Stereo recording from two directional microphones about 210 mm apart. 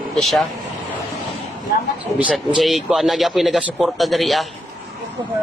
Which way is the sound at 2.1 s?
5° right (ahead or behind).